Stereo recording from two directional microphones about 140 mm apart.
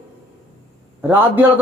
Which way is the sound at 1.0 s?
15° right (ahead or behind).